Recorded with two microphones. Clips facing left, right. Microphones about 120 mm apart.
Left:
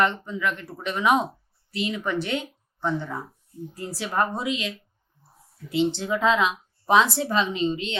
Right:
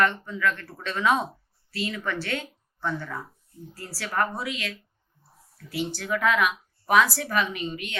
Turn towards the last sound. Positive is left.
turn(degrees=25)  # may be behind; listen again after turning